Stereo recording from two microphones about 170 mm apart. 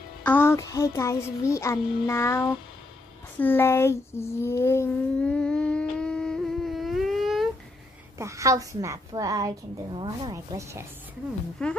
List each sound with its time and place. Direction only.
0.2 s child singing: 10° left (ahead or behind)
3.3 s a sound: 10° left (ahead or behind)
8.2 s a woman's voice: 20° right (ahead or behind)
11.6 s speech: 5° left (ahead or behind)